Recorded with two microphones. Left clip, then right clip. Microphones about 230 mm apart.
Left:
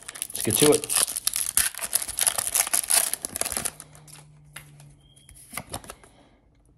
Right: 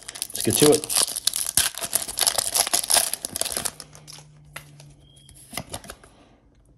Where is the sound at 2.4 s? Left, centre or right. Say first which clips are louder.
Right 4 dB; centre.